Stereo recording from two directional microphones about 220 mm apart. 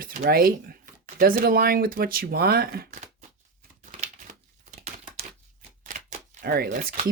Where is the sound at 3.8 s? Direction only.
35° right (ahead or behind).